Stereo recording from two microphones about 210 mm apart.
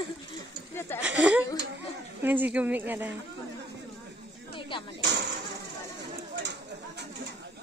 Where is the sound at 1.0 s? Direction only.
5° right (ahead or behind).